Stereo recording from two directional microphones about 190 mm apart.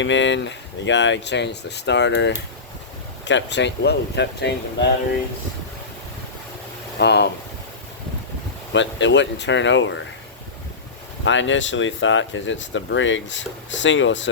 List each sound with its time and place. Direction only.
0.0 s speech: 75° left (ahead or behind)
7.0 s speech: 60° left (ahead or behind)
8.7 s speech: 70° left (ahead or behind)
11.3 s speech: 80° left